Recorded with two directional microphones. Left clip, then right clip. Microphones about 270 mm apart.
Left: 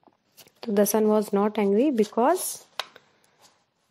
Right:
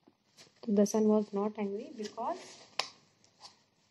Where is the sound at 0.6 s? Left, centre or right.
Left.